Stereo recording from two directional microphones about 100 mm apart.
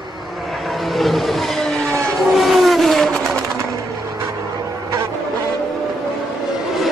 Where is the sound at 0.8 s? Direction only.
Centre (ahead or behind).